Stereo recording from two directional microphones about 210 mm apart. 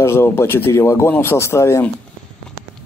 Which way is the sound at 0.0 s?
10° left (ahead or behind).